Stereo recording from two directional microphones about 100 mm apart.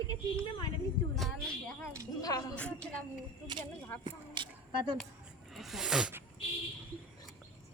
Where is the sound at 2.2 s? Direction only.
40° left (ahead or behind).